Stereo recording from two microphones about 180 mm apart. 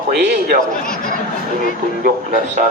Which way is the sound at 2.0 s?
50° right (ahead or behind).